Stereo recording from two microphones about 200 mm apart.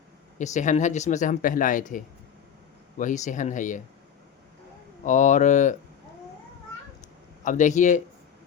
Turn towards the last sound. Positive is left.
turn(degrees=40)  # may be behind; listen again after turning